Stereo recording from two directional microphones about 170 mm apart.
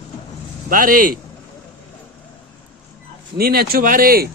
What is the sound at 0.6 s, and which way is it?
Speech, 55° right (ahead or behind).